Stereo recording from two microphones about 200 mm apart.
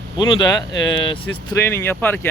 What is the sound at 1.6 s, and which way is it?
Speech, 10° left (ahead or behind).